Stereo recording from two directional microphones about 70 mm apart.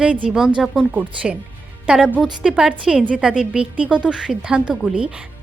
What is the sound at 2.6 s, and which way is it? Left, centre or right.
A woman's voice, centre.